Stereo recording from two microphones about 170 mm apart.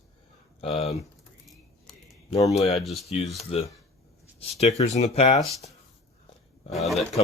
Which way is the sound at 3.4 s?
35° left (ahead or behind).